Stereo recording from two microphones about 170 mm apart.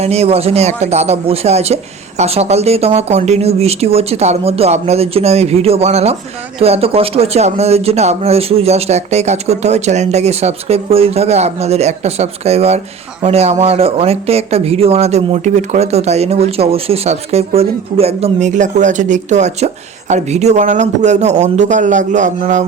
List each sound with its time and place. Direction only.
0.0 s speech: 40° right (ahead or behind)